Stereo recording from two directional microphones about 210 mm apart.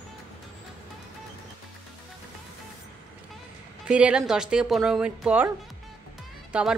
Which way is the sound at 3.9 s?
5° right (ahead or behind).